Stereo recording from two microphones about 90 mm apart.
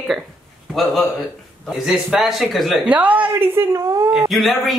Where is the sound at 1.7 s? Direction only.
5° right (ahead or behind).